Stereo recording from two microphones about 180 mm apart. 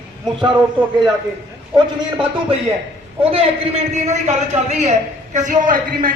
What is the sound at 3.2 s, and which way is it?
A man's voice, 30° right (ahead or behind).